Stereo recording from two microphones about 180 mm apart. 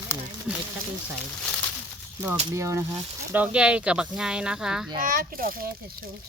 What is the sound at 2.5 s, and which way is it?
Speech, 15° right (ahead or behind).